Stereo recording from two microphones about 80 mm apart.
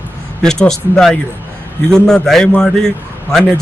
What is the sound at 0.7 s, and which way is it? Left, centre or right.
A man's voice, centre.